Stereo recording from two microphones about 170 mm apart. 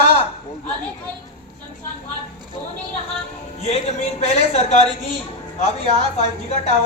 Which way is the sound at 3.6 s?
40° left (ahead or behind).